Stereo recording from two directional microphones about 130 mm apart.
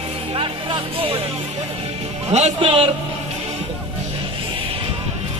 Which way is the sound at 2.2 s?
60° right (ahead or behind).